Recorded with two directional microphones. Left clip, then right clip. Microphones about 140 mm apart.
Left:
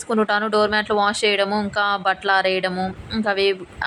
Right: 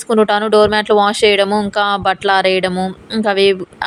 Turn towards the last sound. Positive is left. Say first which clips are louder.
# right 7 dB
turn(degrees=-30)  # may be behind; listen again after turning